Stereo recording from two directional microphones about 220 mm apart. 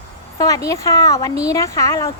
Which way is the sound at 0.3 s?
15° left (ahead or behind).